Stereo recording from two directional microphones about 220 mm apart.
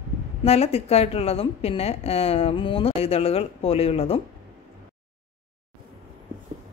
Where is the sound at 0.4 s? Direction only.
25° left (ahead or behind).